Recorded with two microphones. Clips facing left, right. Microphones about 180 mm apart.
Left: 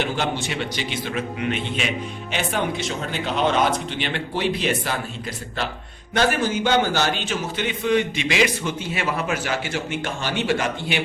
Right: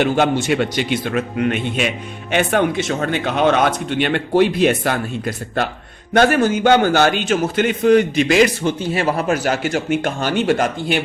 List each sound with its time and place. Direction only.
0.2 s speech: 55° right (ahead or behind)